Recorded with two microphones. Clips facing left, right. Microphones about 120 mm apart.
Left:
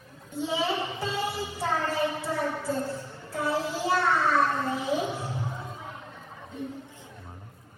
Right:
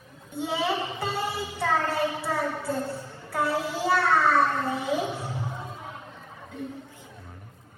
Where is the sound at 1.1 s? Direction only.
60° right (ahead or behind).